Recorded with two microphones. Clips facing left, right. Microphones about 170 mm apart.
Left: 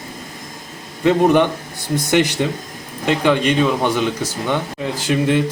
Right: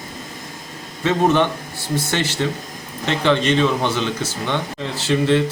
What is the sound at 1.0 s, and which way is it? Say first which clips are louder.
Speech: left 3 dB; 15° left (ahead or behind).